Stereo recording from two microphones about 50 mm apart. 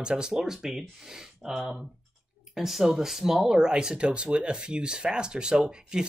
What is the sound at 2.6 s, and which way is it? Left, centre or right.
Speech, centre.